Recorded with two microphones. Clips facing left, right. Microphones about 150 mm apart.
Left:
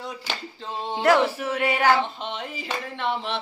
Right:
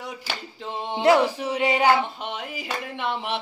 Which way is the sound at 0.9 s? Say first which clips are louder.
Right 1 dB; 15° right (ahead or behind).